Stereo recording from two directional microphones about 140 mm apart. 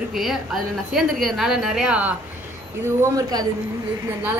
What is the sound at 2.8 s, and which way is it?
Speech, 20° right (ahead or behind).